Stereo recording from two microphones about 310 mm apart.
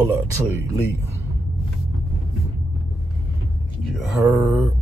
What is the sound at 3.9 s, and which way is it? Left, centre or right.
Speech, centre.